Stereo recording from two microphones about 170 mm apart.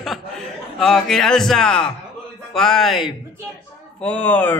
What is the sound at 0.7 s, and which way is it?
Speech, centre (ahead or behind).